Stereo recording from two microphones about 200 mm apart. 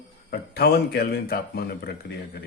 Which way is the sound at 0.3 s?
50° left (ahead or behind).